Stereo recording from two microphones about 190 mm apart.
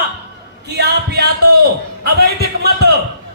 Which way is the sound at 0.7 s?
60° right (ahead or behind).